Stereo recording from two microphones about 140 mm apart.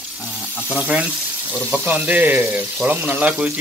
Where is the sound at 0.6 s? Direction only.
10° right (ahead or behind).